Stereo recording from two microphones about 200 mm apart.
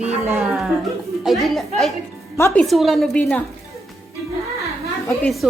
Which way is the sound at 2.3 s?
15° left (ahead or behind).